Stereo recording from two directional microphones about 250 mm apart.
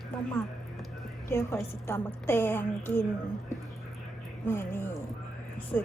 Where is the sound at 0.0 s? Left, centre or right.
Centre.